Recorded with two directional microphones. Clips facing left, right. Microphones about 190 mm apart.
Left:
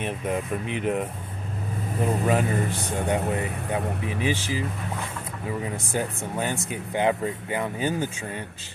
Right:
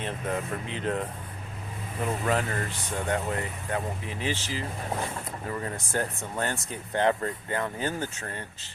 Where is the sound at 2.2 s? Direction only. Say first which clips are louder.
Left 3 dB; 15° left (ahead or behind).